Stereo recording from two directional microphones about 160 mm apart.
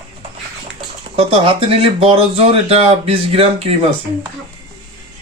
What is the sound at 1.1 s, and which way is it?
Speech, 35° right (ahead or behind).